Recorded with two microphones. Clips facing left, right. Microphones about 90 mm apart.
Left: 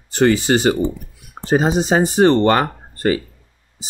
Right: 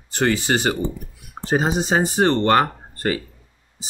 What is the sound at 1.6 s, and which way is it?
Speech, 90° left.